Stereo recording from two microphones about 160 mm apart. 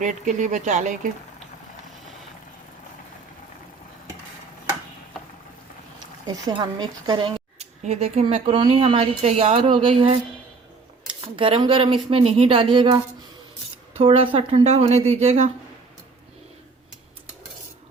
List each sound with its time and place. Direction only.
0.0 s speech: 50° right (ahead or behind)
6.2 s a woman's voice: 25° right (ahead or behind)
11.3 s a woman's voice: 30° right (ahead or behind)
14.0 s a woman's voice: 35° right (ahead or behind)